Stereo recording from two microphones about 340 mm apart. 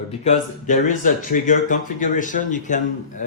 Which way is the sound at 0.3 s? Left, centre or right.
Left.